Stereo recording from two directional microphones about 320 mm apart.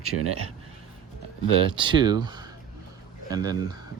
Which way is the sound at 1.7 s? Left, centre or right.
Centre.